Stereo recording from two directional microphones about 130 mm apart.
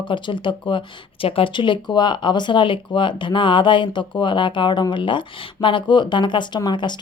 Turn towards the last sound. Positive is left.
turn(degrees=35)  # may be behind; listen again after turning